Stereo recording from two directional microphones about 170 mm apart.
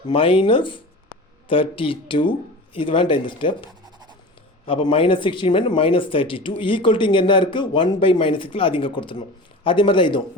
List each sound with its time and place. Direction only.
0.1 s speech: 30° left (ahead or behind)